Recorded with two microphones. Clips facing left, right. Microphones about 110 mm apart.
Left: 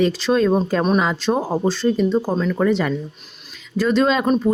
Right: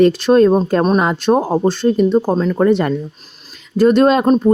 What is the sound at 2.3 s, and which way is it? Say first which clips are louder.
Speech: right 5 dB; 40° right (ahead or behind).